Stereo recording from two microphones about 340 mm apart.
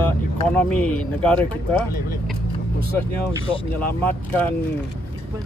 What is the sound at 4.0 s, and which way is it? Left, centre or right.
Speech, centre.